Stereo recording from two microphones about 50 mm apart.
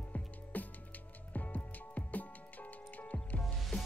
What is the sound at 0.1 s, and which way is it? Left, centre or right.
Music, left.